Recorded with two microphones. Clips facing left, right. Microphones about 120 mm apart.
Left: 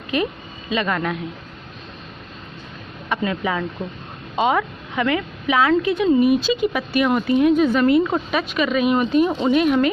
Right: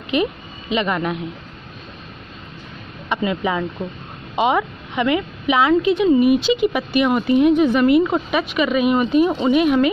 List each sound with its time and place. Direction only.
0.1 s speech: 20° right (ahead or behind)
3.1 s a woman's voice: 15° right (ahead or behind)